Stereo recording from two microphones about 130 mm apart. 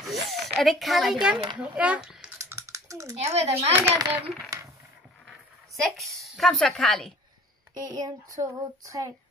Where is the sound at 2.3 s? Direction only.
25° right (ahead or behind).